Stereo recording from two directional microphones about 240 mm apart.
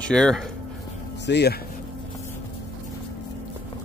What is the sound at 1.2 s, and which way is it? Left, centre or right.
Speech, left.